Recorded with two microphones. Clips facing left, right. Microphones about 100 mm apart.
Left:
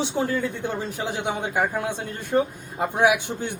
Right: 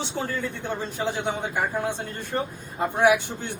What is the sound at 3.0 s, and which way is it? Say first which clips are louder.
Speech: even; 15° left (ahead or behind).